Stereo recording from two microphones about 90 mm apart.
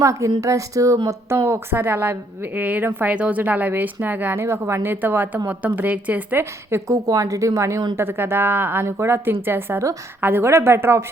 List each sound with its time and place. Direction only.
0.0 s a woman's voice: 35° right (ahead or behind); by 6.4 s 15° right (ahead or behind)
6.7 s a woman's voice: 30° right (ahead or behind)
6.9 s a woman's voice: 40° right (ahead or behind)